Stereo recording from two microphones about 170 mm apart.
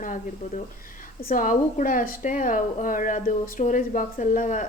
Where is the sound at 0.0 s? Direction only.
50° left (ahead or behind).